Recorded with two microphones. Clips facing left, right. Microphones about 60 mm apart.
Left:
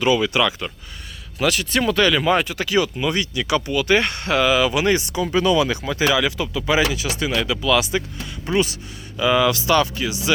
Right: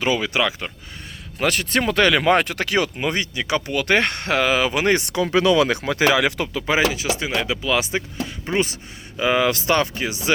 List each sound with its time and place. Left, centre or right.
0.0 s speech: right
1.4 s speech: right
2.0 s speech: right
3.7 s speech: right